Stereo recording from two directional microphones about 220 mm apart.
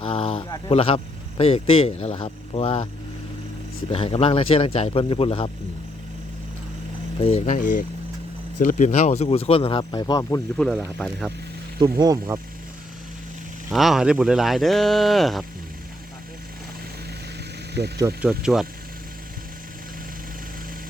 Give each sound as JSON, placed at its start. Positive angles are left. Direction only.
{"t": 0.0, "sound": "speech", "side_deg": 25}
{"t": 3.9, "sound": "speech", "side_deg": 25}
{"t": 7.2, "sound": "speech", "side_deg": 25}
{"t": 10.6, "sound": "speech", "side_deg": 5}
{"t": 11.8, "sound": "speech", "side_deg": -20}
{"t": 13.7, "sound": "speech", "side_deg": 0}
{"t": 17.7, "sound": "speech", "side_deg": -50}
{"t": 18.0, "sound": "speech", "side_deg": -5}